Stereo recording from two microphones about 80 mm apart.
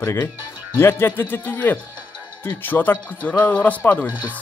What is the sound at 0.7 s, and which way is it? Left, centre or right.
Speech, left.